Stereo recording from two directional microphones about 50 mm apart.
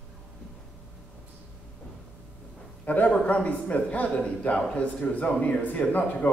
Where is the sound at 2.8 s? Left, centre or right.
Left.